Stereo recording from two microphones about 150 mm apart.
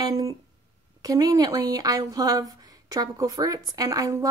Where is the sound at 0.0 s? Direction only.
25° right (ahead or behind).